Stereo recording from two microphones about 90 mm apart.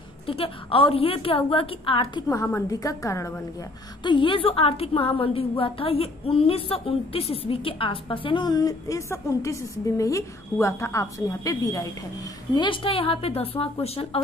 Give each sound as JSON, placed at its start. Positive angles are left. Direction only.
{"t": 0.3, "sound": "a woman's voice", "side_deg": 90}
{"t": 2.2, "sound": "a woman's voice", "side_deg": 30}
{"t": 2.7, "sound": "a woman's voice", "side_deg": 40}
{"t": 4.0, "sound": "a woman's voice", "side_deg": 65}
{"t": 8.5, "sound": "a woman's voice", "side_deg": 45}
{"t": 12.5, "sound": "a woman's voice", "side_deg": 65}